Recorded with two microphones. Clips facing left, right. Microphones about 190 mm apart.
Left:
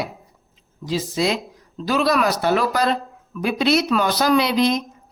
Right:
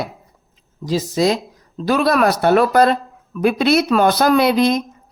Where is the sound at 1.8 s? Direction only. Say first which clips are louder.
Right 4 dB; 55° right (ahead or behind).